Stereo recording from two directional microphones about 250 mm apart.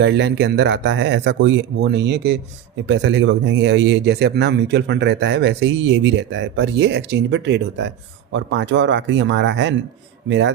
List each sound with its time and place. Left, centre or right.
0.0 s speech: right